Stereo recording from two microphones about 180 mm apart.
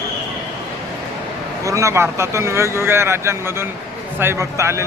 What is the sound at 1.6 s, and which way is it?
Speech, 15° right (ahead or behind).